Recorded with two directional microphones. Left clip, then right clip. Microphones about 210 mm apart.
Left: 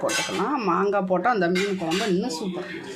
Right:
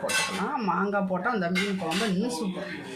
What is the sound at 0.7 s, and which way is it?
Speech, 50° left (ahead or behind).